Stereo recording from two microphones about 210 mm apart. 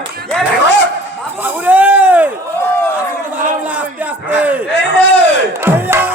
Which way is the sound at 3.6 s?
5° right (ahead or behind).